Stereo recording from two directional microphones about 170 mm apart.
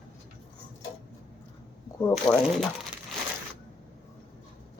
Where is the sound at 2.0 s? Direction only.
10° left (ahead or behind).